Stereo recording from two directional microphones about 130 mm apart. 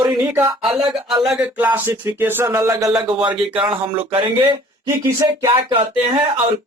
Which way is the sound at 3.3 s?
40° right (ahead or behind).